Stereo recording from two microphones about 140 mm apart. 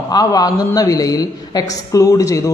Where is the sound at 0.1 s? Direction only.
25° left (ahead or behind).